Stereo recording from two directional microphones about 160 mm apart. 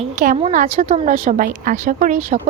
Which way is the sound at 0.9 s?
40° right (ahead or behind).